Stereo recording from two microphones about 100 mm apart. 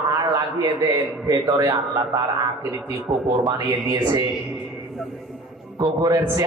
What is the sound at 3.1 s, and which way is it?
Speech, 55° right (ahead or behind).